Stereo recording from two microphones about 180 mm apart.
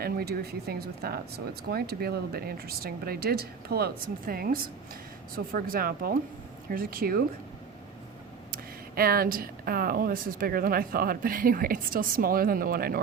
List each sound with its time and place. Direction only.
0.0 s speech: 60° right (ahead or behind)
9.0 s speech: 55° right (ahead or behind)